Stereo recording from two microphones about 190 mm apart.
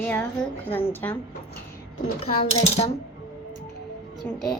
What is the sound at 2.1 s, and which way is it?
Speech, 30° left (ahead or behind).